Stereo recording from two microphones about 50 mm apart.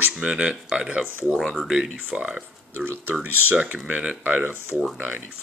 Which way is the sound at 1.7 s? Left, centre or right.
Centre.